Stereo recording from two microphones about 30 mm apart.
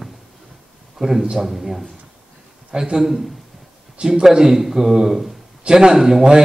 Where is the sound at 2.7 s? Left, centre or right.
Right.